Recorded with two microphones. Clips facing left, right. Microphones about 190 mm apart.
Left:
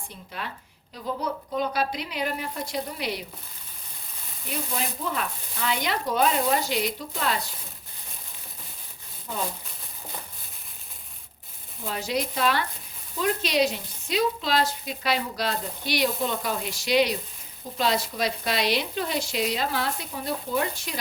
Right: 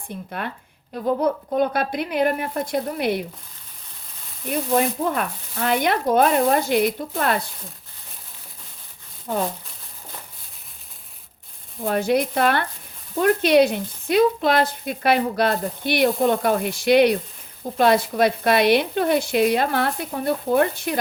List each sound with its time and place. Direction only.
0.3 s speech: 55° right (ahead or behind)
4.4 s speech: 55° right (ahead or behind)
11.9 s speech: 55° right (ahead or behind)